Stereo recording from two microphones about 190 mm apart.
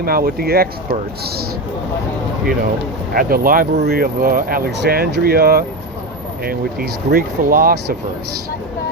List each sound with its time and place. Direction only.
0.0 s speech: 50° right (ahead or behind)
3.2 s speech: 50° right (ahead or behind)